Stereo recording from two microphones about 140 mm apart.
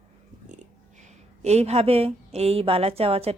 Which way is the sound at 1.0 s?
50° right (ahead or behind).